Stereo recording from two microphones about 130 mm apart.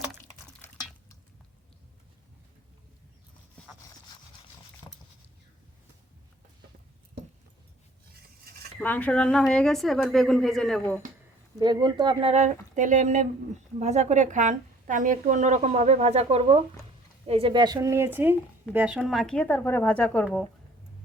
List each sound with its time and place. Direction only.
4.8 s patter: 35° left (ahead or behind)
8.8 s a woman's voice: 10° left (ahead or behind)
11.6 s speech: 35° right (ahead or behind)
12.3 s a woman's voice: 65° right (ahead or behind); by 17.7 s 35° right (ahead or behind)
17.7 s speech: 20° right (ahead or behind)
18.9 s a woman's voice: centre (ahead or behind)